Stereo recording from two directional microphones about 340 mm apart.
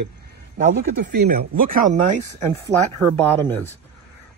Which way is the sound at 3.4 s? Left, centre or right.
Centre.